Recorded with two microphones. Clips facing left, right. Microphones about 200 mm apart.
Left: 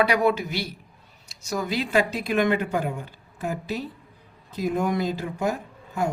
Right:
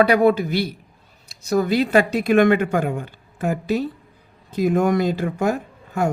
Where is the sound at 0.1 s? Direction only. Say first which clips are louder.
Right 6 dB; 50° right (ahead or behind).